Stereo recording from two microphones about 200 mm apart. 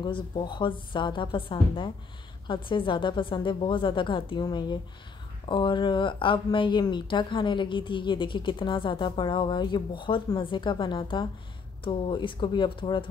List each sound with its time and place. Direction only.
0.0 s speech: 25° left (ahead or behind)